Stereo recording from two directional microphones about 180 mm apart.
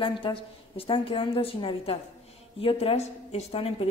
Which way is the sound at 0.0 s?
30° left (ahead or behind).